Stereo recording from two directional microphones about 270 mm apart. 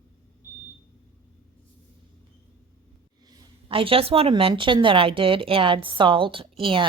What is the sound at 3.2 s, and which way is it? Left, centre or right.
A woman's voice, centre.